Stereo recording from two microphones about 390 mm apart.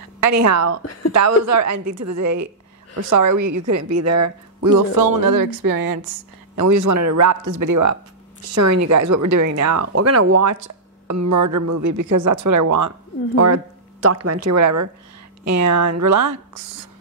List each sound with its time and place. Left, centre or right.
0.2 s a woman's voice: right
6.5 s a woman's voice: right
14.0 s a woman's voice: right